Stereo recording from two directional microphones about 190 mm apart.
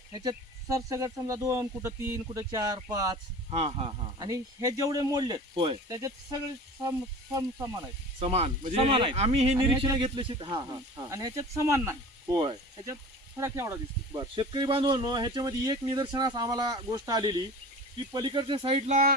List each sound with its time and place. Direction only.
0.1 s speech: 20° right (ahead or behind)
3.5 s speech: 30° right (ahead or behind)
4.2 s speech: 20° right (ahead or behind)
7.3 s speech: 15° right (ahead or behind)
8.2 s speech: 30° right (ahead or behind)
9.6 s speech: 20° right (ahead or behind)